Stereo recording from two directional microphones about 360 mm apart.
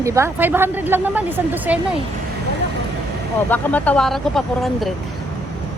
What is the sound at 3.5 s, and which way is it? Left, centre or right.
Speech, centre.